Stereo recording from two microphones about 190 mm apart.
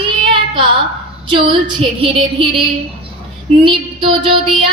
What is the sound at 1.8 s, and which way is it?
Female singing, 25° right (ahead or behind).